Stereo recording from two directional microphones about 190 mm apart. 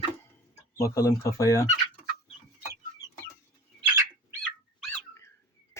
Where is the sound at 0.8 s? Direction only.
15° left (ahead or behind).